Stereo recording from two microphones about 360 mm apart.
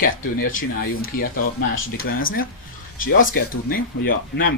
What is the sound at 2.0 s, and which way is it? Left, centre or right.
Speech, left.